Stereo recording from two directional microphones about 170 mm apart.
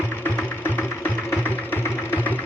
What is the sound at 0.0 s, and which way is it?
Music, 10° left (ahead or behind).